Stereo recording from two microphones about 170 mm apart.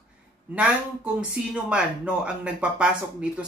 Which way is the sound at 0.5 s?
5° right (ahead or behind).